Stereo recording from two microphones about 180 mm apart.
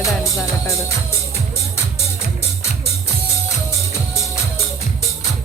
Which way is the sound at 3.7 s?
15° left (ahead or behind).